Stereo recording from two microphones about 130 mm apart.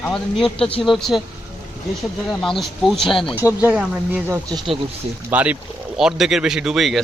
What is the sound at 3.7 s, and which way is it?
Speech, 10° right (ahead or behind).